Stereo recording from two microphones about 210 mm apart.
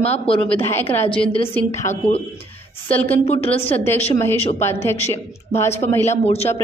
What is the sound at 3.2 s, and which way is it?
Speech, 30° left (ahead or behind).